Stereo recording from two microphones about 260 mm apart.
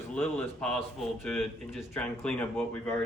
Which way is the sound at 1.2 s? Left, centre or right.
Centre.